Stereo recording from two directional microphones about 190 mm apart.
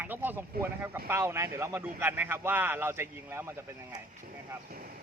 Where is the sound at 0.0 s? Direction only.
10° right (ahead or behind).